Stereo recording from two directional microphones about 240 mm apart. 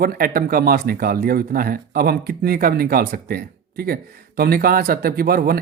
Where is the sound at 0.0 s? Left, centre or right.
Right.